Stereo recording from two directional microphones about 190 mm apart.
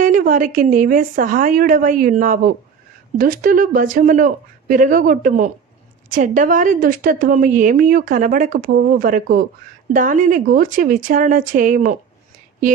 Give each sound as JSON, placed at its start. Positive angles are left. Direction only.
{"t": 0.0, "sound": "a woman's voice", "side_deg": -45}